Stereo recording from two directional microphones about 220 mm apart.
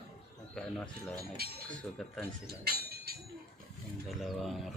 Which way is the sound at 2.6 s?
45° right (ahead or behind).